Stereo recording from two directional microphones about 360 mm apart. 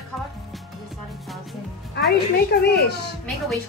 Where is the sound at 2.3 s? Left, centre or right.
Left.